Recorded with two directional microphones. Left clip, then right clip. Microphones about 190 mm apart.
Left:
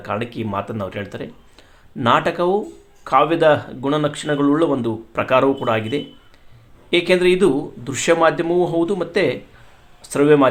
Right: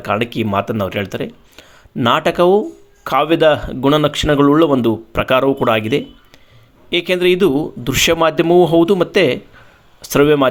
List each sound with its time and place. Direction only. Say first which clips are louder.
0.0 s speech: right 7 dB; 40° right (ahead or behind)